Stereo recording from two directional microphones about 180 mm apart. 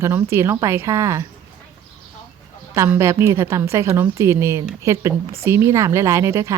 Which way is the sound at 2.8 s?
15° right (ahead or behind).